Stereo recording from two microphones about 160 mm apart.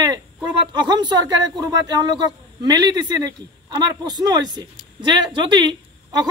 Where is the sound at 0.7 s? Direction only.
25° right (ahead or behind).